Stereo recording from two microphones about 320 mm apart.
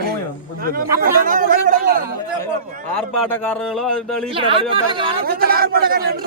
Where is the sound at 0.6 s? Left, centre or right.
Right.